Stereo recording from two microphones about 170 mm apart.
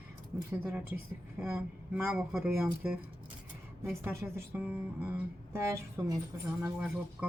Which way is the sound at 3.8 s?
15° right (ahead or behind).